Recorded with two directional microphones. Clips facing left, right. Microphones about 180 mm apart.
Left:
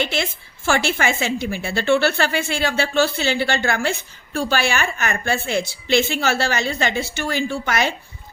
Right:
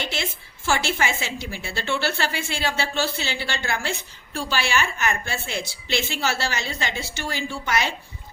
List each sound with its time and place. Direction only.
0.1 s a woman's voice: 55° left (ahead or behind)